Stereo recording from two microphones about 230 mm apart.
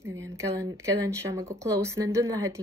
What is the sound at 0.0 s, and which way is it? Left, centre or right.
Speech, centre.